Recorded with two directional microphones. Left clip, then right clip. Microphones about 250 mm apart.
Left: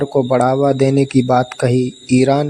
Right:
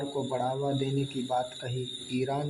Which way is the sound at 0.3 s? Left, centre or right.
Left.